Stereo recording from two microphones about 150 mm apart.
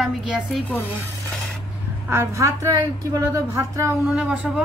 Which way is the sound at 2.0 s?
20° right (ahead or behind).